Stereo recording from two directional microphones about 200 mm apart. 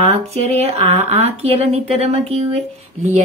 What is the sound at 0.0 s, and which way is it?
Speech, 30° right (ahead or behind).